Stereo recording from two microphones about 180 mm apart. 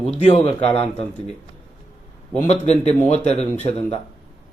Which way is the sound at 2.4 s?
35° left (ahead or behind).